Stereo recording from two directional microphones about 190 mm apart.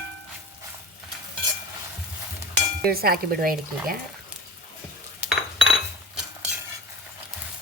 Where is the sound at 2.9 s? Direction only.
50° right (ahead or behind).